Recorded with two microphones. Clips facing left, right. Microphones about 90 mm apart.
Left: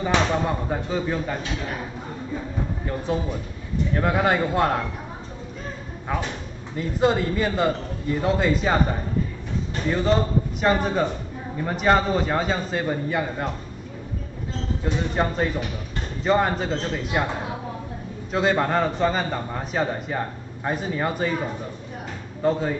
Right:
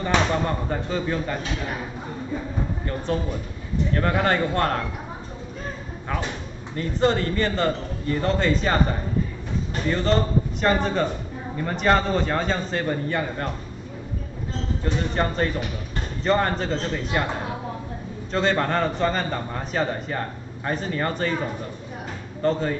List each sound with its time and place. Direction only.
0.0 s speech: 5° left (ahead or behind)
3.1 s a man's voice: 5° left (ahead or behind)
6.1 s a man's voice: 10° left (ahead or behind)
9.8 s a man's voice: 5° left (ahead or behind)
15.1 s speech: 5° left (ahead or behind)
18.3 s a man's voice: 5° left (ahead or behind)
22.4 s a man's voice: 5° left (ahead or behind)